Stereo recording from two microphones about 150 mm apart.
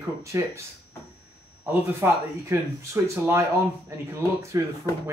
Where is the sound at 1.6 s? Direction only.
15° right (ahead or behind).